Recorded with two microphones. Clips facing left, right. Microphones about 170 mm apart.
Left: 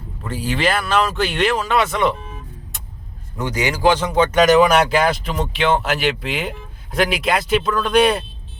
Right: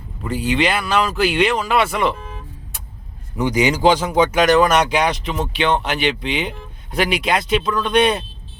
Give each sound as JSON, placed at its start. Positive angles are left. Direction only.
{"t": 0.2, "sound": "speech", "side_deg": 0}
{"t": 3.3, "sound": "a man's voice", "side_deg": -15}
{"t": 4.4, "sound": "speech", "side_deg": 0}